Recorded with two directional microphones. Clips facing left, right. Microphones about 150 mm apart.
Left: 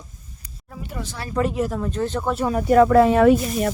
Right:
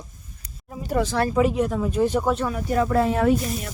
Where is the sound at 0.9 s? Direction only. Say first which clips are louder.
Right 12 dB; 85° right.